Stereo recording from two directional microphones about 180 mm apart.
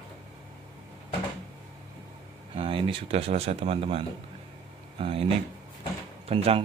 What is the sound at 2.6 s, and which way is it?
Speech, 30° right (ahead or behind).